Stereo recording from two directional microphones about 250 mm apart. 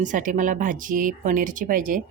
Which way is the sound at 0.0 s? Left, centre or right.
Right.